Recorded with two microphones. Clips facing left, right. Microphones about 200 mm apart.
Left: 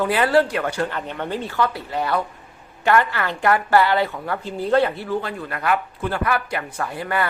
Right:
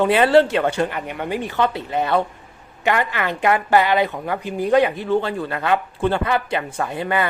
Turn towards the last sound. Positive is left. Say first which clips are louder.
# right 3 dB
turn(degrees=-20)  # may be behind; listen again after turning